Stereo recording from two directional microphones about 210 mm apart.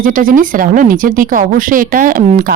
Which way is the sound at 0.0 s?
40° right (ahead or behind).